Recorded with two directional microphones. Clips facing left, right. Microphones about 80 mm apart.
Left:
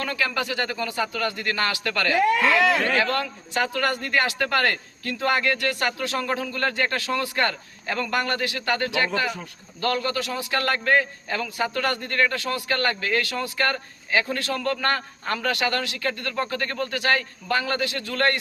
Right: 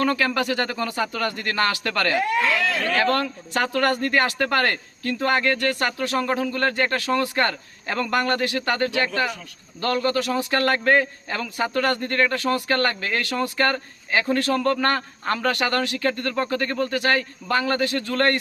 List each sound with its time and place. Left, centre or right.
0.0 s a man's voice: right